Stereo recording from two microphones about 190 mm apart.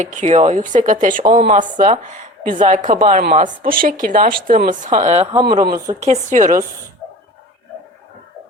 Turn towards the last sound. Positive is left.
turn(degrees=-40)  # may be behind; listen again after turning